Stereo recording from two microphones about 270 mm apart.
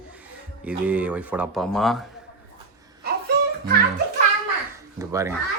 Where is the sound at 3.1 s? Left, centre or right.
Right.